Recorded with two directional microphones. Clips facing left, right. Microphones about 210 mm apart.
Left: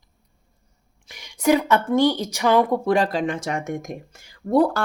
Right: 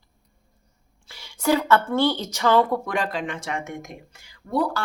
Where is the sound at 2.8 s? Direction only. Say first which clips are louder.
Left 7 dB; 35° left (ahead or behind).